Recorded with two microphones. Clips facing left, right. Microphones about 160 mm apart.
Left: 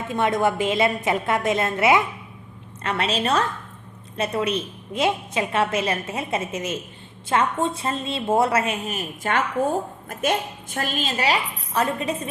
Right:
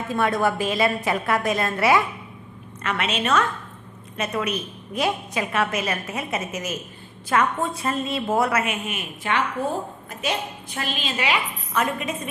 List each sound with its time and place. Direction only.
0.1 s a woman's voice: 20° left (ahead or behind)
2.8 s a woman's voice: 30° left (ahead or behind)